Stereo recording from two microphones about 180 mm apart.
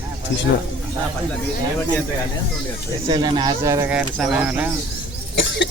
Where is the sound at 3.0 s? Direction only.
25° right (ahead or behind); by 4.7 s 5° right (ahead or behind).